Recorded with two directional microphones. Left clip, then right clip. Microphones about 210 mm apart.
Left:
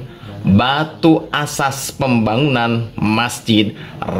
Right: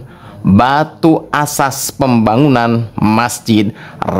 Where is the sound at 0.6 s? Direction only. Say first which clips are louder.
Right 5 dB; 50° right (ahead or behind).